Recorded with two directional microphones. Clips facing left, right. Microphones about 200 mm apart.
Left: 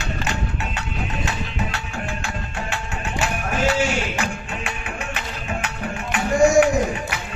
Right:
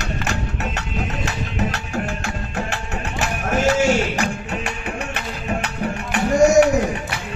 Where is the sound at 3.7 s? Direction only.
40° right (ahead or behind).